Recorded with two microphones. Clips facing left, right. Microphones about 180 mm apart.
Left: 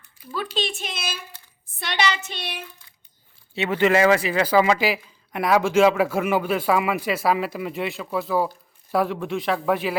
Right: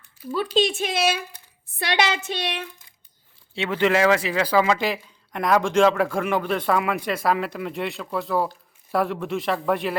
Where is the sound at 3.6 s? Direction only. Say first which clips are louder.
Left 2 dB; 5° left (ahead or behind).